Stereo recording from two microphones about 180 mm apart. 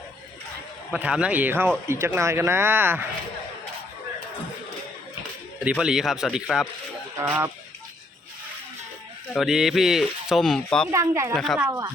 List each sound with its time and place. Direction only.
0.9 s speech: 5° right (ahead or behind)
5.5 s speech: 5° right (ahead or behind)
7.2 s speech: 15° right (ahead or behind)
9.3 s speech: centre (ahead or behind)
10.9 s speech: 15° right (ahead or behind)
11.3 s speech: centre (ahead or behind)
11.6 s speech: 15° right (ahead or behind)